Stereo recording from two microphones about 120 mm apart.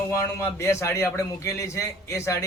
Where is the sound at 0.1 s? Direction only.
25° left (ahead or behind).